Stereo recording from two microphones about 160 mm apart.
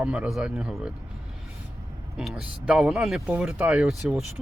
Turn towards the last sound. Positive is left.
turn(degrees=-5)  # may be behind; listen again after turning